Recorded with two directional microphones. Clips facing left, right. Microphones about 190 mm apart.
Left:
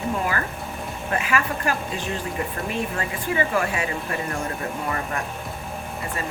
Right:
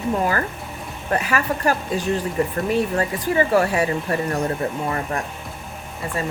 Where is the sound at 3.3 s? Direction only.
40° right (ahead or behind).